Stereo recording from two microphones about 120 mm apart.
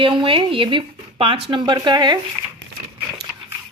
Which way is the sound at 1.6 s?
40° right (ahead or behind).